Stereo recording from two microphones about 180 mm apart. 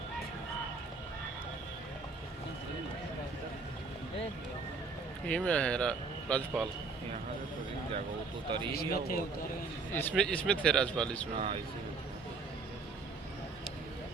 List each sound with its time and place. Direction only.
5.2 s speech: 5° left (ahead or behind)
8.7 s speech: 60° left (ahead or behind)
9.9 s speech: 10° left (ahead or behind)
11.3 s speech: 30° right (ahead or behind)